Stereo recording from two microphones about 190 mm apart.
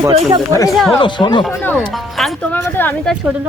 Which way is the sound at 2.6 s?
10° left (ahead or behind).